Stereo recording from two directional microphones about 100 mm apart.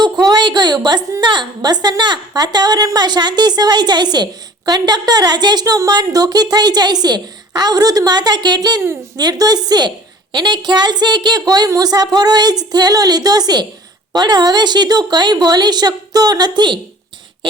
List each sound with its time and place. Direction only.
0.0 s a woman's voice: 45° right (ahead or behind)